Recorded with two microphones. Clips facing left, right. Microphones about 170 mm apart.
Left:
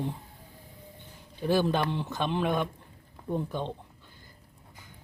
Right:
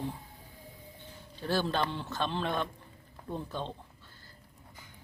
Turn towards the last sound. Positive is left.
turn(degrees=15)  # may be behind; listen again after turning